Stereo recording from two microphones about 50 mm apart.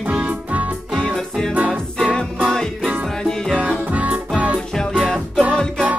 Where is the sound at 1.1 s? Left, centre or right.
Centre.